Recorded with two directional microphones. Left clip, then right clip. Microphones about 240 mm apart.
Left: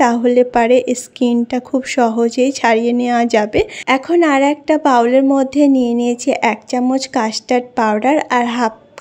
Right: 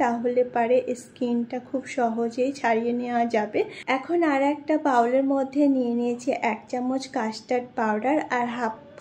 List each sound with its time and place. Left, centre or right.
0.0 s a woman's voice: left